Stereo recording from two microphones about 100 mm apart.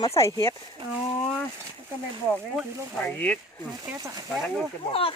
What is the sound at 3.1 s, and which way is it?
Speech, 15° left (ahead or behind).